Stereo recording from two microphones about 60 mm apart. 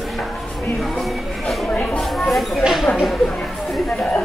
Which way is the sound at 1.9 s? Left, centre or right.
Centre.